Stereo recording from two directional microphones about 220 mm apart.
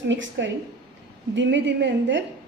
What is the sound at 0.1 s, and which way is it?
A woman's voice, 55° right (ahead or behind).